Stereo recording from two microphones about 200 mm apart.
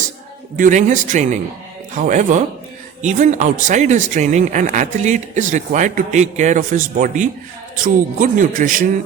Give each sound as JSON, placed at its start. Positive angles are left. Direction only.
{"t": 0.5, "sound": "speech", "side_deg": -40}